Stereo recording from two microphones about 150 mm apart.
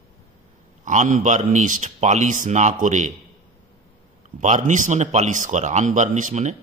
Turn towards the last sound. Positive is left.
turn(degrees=-50)  # may be behind; listen again after turning